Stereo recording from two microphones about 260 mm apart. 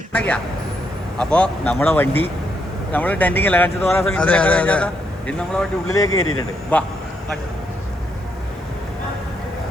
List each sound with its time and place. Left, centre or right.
0.1 s a man's voice: centre
6.1 s speech: left
6.7 s speech: centre